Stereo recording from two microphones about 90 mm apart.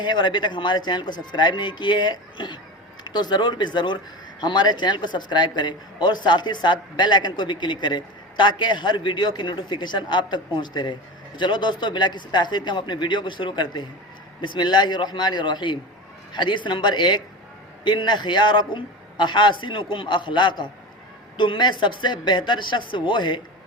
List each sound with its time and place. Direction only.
0.0 s a man's voice: 55° left (ahead or behind)